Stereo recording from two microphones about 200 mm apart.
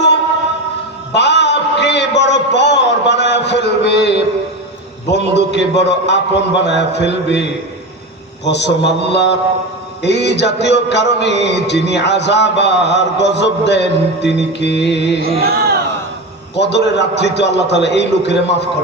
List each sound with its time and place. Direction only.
1.1 s a sound: 60° left (ahead or behind)
5.0 s music: 60° left (ahead or behind)
8.4 s music: 60° left (ahead or behind)
15.2 s chant: 50° right (ahead or behind)
16.6 s music: 60° left (ahead or behind)